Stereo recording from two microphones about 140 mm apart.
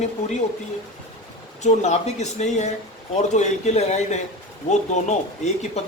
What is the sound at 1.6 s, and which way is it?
Speech, 55° left (ahead or behind).